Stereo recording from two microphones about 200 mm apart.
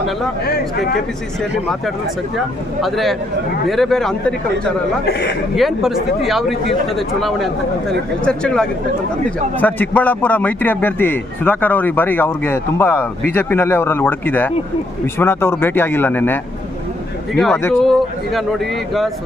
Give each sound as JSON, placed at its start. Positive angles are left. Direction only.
{"t": 2.8, "sound": "speech", "side_deg": 0}
{"t": 5.0, "sound": "a man's voice", "side_deg": 60}
{"t": 5.5, "sound": "a man's voice", "side_deg": 0}